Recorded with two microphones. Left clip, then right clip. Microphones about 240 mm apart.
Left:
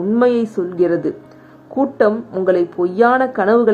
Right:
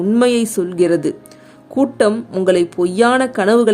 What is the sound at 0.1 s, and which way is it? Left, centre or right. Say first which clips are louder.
Speech: even; right.